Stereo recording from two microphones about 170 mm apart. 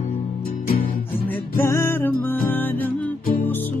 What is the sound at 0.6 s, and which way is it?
Music, 60° left (ahead or behind).